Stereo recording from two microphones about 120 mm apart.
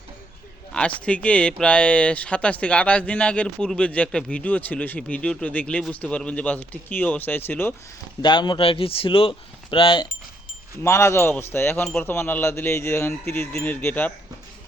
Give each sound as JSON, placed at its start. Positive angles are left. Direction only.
{"t": 0.7, "sound": "speech", "side_deg": 10}
{"t": 8.2, "sound": "a man's voice", "side_deg": 40}
{"t": 10.8, "sound": "speech", "side_deg": 20}